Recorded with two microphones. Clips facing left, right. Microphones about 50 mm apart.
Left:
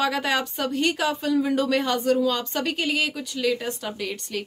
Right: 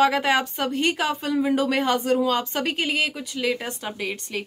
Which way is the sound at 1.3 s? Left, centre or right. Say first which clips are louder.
Even; right.